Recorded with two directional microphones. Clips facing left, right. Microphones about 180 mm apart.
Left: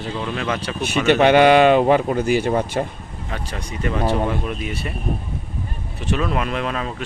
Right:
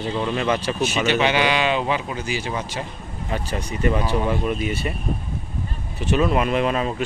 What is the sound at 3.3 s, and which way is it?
A man's voice, 5° right (ahead or behind).